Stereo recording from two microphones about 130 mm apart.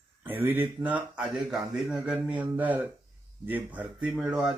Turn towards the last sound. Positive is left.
turn(degrees=-10)  # may be behind; listen again after turning